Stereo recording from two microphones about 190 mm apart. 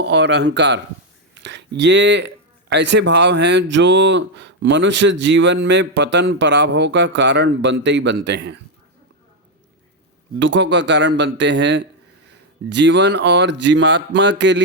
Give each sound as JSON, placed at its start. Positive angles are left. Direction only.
{"t": 0.0, "sound": "speech", "side_deg": -65}
{"t": 10.4, "sound": "speech", "side_deg": -70}